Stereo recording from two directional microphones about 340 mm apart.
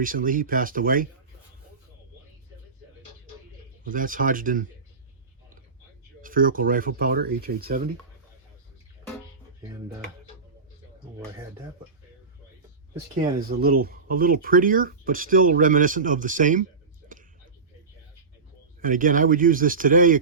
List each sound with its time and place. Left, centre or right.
0.0 s speech: right
3.8 s speech: right
6.2 s speech: right
13.5 s speech: right
18.8 s speech: right